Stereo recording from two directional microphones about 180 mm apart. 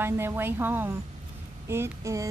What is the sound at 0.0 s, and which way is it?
A woman's voice, 10° right (ahead or behind).